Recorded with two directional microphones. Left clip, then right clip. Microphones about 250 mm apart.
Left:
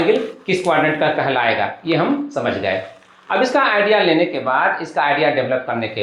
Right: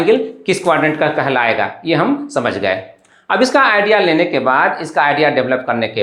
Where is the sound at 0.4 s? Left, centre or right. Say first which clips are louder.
Right 2 dB; right.